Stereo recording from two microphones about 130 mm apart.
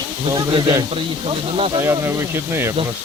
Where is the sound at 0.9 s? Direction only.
45° right (ahead or behind).